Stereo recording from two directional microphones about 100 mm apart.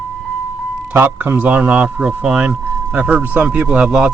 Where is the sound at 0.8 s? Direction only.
15° right (ahead or behind).